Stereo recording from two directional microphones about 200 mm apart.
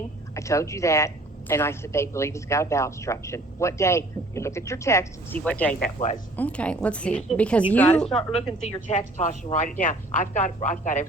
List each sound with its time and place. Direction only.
0.3 s speech: 15° left (ahead or behind)
5.8 s speech: 40° left (ahead or behind)
6.3 s a woman's voice: 5° left (ahead or behind)
8.9 s speech: 35° left (ahead or behind)